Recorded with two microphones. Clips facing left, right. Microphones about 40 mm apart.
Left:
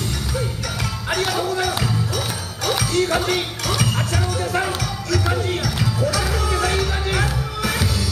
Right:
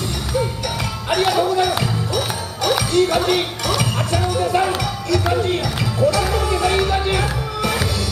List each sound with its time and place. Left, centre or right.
1.5 s music: centre
3.1 s speech: centre
3.6 s music: centre
4.1 s music: centre
4.6 s music: centre
5.4 s speech: right
5.9 s music: right
6.2 s music: centre